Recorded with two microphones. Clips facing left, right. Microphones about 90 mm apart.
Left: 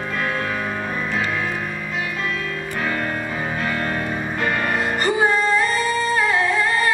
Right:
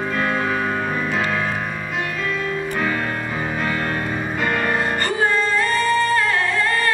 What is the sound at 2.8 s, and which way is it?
Music, centre (ahead or behind).